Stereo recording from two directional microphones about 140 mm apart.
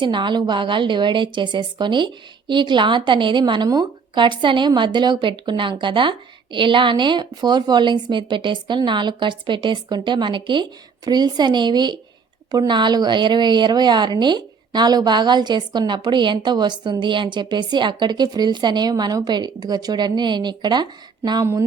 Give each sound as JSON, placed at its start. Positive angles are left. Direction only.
{"t": 0.0, "sound": "a woman's voice", "side_deg": -35}